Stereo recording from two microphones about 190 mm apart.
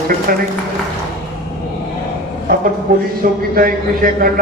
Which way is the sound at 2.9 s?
45° right (ahead or behind).